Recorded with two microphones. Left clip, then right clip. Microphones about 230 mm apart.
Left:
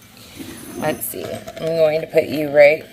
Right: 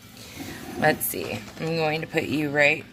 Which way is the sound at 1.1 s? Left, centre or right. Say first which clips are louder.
Left 4 dB; right.